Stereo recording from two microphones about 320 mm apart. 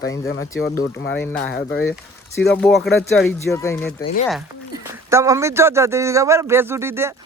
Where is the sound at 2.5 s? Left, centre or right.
Centre.